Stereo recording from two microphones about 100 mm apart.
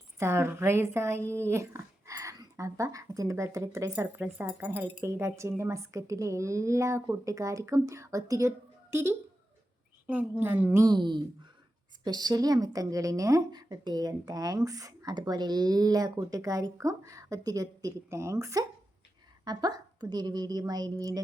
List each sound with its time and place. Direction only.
0.2 s speech: 25° right (ahead or behind)
10.3 s speech: 20° right (ahead or behind)
10.8 s a woman's voice: 50° right (ahead or behind); by 18.6 s 30° right (ahead or behind)
19.5 s a woman's voice: 45° right (ahead or behind)